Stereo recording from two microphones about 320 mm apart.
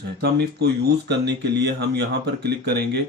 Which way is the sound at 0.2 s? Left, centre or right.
Right.